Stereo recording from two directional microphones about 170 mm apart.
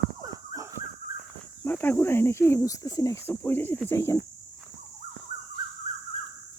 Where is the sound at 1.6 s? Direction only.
10° left (ahead or behind).